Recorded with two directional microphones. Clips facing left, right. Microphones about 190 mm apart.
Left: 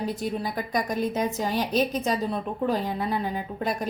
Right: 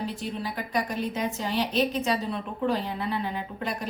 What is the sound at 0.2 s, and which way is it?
A woman's voice, 45° left (ahead or behind).